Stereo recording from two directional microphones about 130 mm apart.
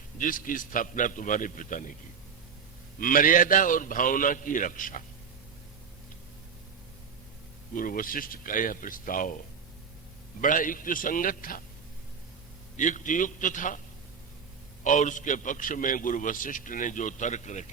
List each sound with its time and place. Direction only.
0.2 s a man's voice: 90° left
3.0 s a man's voice: 90° left
7.8 s a man's voice: 90° left
10.4 s a man's voice: 90° left
12.7 s a man's voice: 75° left (ahead or behind)
14.8 s a man's voice: 75° left (ahead or behind)